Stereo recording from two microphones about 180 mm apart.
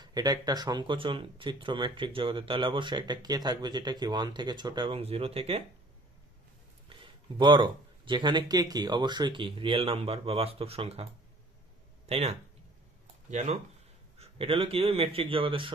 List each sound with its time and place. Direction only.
0.0 s speech: 20° right (ahead or behind)
6.9 s speech: 25° right (ahead or behind)
12.1 s a man's voice: 35° right (ahead or behind)
14.1 s a man's voice: 30° right (ahead or behind)